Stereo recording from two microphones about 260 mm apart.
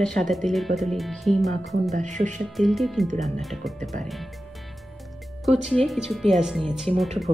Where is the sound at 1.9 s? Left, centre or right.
Right.